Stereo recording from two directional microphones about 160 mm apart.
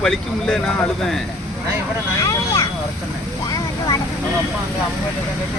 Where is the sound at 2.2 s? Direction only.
20° left (ahead or behind).